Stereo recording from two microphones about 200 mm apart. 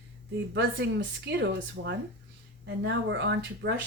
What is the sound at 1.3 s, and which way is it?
Speech, 60° right (ahead or behind).